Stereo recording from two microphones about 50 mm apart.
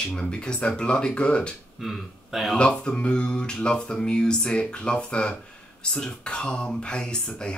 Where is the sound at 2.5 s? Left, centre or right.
Centre.